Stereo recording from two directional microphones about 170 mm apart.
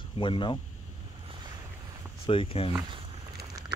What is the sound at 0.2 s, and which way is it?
Speech, 30° left (ahead or behind).